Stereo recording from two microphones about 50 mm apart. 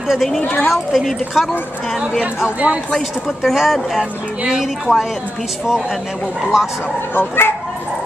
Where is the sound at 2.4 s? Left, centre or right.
Centre.